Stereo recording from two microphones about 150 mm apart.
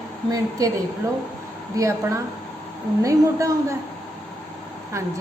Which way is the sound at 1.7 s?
20° right (ahead or behind).